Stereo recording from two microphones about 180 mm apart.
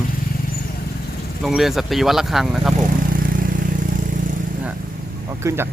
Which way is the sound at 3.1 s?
50° right (ahead or behind).